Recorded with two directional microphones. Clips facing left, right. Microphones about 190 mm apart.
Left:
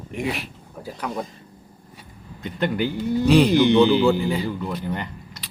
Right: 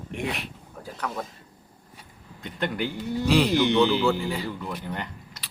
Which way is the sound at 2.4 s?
Centre (ahead or behind).